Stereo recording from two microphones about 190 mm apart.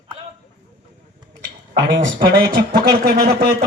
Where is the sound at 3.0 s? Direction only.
55° right (ahead or behind).